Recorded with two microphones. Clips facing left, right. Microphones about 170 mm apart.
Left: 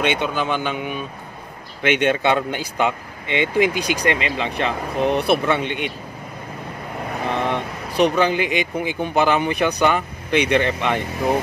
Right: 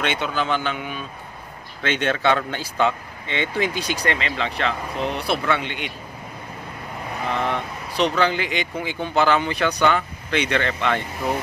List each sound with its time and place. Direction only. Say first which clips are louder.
0.0 s speech: left 3 dB; 15° left (ahead or behind)
7.3 s speech: left 1 dB; 20° left (ahead or behind)